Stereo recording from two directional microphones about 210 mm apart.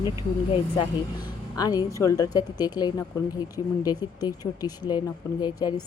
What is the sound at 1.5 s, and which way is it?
A woman's voice, 20° left (ahead or behind).